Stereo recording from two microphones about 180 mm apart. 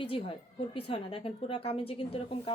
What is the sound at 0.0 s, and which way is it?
A woman's voice, 30° left (ahead or behind).